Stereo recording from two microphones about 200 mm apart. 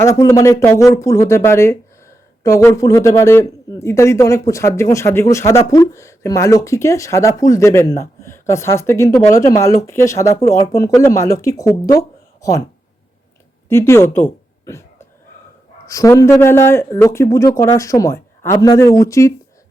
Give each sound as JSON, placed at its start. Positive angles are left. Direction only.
{"t": 0.0, "sound": "a man's voice", "side_deg": 15}
{"t": 13.7, "sound": "a woman's voice", "side_deg": 10}